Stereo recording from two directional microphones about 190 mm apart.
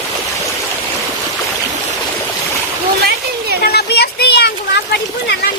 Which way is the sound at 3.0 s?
60° right (ahead or behind).